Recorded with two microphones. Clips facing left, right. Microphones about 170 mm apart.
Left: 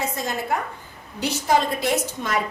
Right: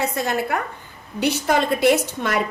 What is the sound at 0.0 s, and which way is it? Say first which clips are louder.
A woman's voice: right 4 dB; 65° right (ahead or behind).